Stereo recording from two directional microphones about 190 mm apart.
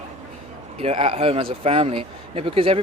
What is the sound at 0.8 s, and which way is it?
Speech, 30° right (ahead or behind).